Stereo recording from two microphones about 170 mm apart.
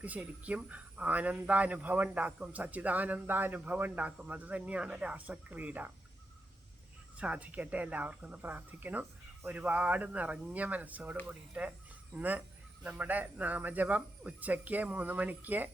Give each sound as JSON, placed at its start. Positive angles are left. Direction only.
{"t": 0.0, "sound": "a man's voice", "side_deg": -10}
{"t": 7.2, "sound": "a man's voice", "side_deg": -10}